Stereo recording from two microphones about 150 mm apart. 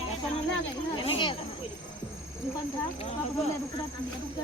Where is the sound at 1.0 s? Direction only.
35° left (ahead or behind).